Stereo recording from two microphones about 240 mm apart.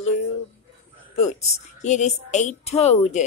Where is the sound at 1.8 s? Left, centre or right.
Left.